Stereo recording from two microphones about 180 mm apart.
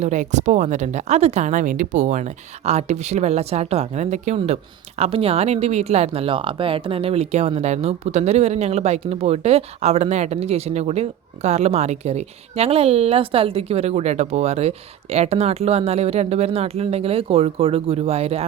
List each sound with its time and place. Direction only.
0.0 s speech: 40° right (ahead or behind)